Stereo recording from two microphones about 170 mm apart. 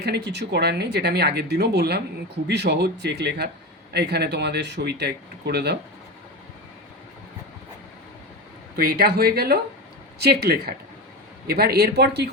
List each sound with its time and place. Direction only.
0.0 s speech: 75° right (ahead or behind)
8.7 s speech: 65° right (ahead or behind)